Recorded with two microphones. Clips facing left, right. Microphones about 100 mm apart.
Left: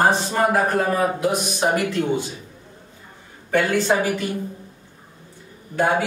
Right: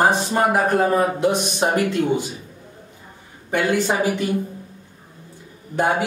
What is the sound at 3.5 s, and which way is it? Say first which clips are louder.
Speech: left 1 dB; 15° right (ahead or behind).